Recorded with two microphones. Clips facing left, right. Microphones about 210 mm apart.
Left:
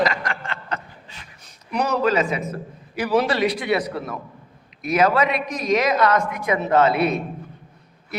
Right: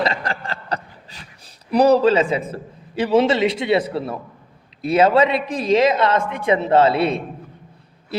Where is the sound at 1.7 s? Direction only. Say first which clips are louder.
Right 7 dB; 35° right (ahead or behind).